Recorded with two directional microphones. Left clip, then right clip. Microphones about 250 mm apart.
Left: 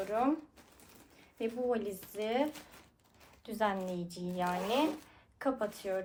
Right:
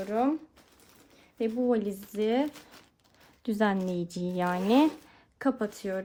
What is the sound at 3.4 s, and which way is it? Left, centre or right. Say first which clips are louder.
Speech: right 5 dB; right.